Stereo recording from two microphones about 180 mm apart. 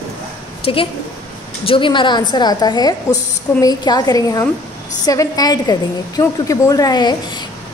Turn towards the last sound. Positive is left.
turn(degrees=25)  # may be behind; listen again after turning